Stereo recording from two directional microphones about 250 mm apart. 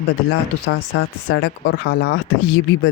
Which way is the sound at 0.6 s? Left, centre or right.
Left.